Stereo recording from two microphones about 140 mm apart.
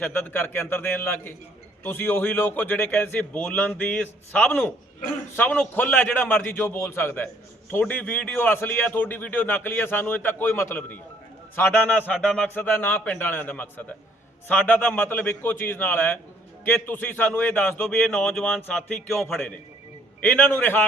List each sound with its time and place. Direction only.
0.0 s a man's voice: 15° left (ahead or behind)
11.9 s speech: centre (ahead or behind)
12.5 s a man's voice: 15° left (ahead or behind)